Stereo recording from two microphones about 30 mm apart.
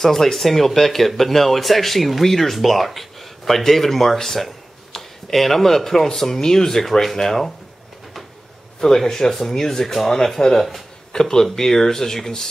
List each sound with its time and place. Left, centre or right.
0.0 s speech: centre
8.8 s speech: centre